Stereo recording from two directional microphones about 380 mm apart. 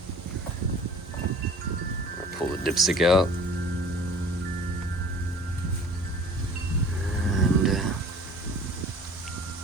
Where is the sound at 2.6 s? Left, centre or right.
Centre.